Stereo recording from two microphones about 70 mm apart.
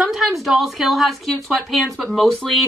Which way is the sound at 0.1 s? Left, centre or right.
Centre.